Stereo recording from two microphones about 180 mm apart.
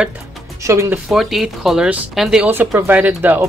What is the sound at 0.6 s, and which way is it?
Speech, 15° right (ahead or behind).